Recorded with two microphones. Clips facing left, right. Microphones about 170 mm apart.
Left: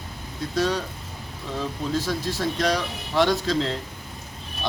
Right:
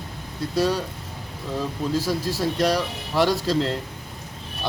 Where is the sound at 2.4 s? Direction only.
5° right (ahead or behind).